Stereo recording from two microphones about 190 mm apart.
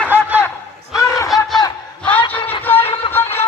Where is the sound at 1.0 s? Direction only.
15° left (ahead or behind).